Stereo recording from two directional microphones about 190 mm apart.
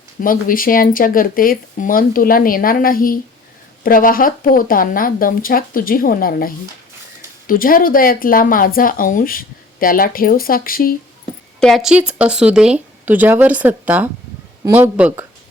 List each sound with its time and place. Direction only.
0.2 s speech: 45° left (ahead or behind)
11.6 s speech: centre (ahead or behind)